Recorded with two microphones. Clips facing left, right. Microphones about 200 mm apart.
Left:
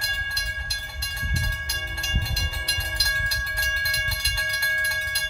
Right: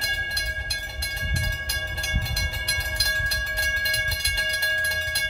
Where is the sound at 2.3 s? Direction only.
60° right (ahead or behind).